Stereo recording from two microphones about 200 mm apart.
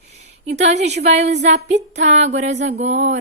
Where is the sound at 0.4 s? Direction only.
35° right (ahead or behind).